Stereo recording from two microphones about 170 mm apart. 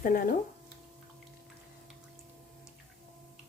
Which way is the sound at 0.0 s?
55° left (ahead or behind).